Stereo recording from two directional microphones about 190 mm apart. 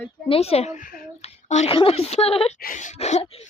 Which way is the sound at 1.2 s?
35° left (ahead or behind).